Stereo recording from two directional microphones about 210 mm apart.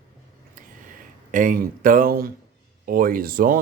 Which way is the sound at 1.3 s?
40° right (ahead or behind).